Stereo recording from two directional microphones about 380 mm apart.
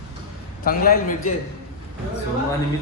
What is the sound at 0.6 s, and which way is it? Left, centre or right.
Speech, left.